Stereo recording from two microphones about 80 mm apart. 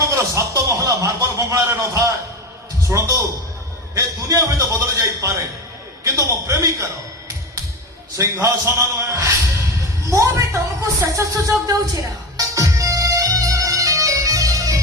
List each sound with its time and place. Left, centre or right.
0.0 s a man's voice: right
8.2 s a man's voice: right
12.4 s music: right